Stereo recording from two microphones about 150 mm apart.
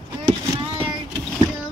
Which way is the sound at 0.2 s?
35° right (ahead or behind).